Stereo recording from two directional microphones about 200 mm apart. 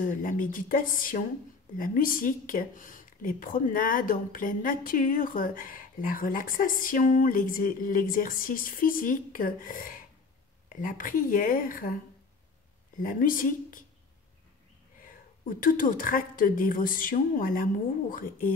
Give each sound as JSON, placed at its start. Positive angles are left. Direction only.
{"t": 0.0, "sound": "speech", "side_deg": 45}
{"t": 15.0, "sound": "speech", "side_deg": 45}